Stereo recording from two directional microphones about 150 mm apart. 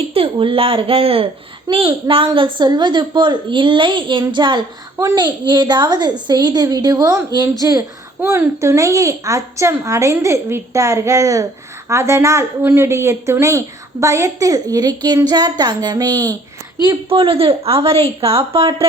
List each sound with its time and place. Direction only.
0.1 s a woman's voice: 35° right (ahead or behind)